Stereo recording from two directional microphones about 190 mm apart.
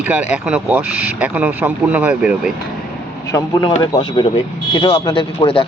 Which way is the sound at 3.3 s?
20° left (ahead or behind).